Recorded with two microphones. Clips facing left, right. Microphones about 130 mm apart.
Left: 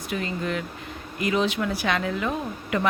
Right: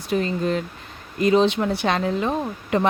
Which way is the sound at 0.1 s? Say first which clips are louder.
Right 6 dB; 35° right (ahead or behind).